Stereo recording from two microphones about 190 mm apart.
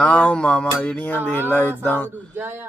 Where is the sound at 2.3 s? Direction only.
10° right (ahead or behind).